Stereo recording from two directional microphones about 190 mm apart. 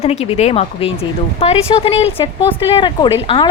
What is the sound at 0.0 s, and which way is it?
Speech, 35° left (ahead or behind).